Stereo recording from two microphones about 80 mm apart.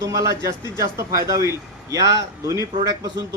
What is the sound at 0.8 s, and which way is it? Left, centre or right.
A man's voice, right.